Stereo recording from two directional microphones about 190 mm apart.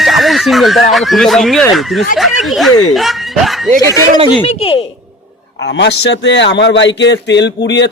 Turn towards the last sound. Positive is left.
turn(degrees=65)  # may be behind; listen again after turning